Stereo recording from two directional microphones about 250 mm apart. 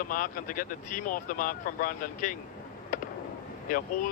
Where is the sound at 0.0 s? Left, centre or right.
Left.